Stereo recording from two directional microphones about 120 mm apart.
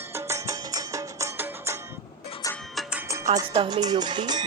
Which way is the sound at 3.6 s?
35° right (ahead or behind).